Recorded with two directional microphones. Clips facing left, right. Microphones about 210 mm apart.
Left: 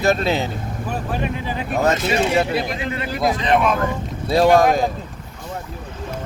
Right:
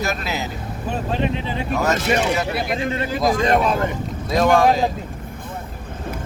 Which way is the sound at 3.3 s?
45° right (ahead or behind).